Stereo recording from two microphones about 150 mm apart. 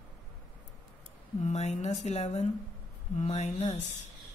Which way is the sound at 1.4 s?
50° left (ahead or behind).